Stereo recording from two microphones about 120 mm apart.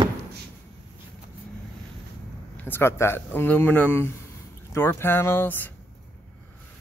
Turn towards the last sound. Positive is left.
turn(degrees=15)  # may be behind; listen again after turning